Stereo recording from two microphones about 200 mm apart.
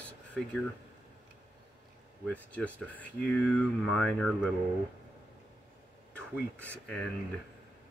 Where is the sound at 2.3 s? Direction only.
5° left (ahead or behind).